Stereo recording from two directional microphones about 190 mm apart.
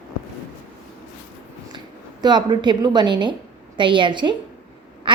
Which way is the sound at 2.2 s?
25° right (ahead or behind).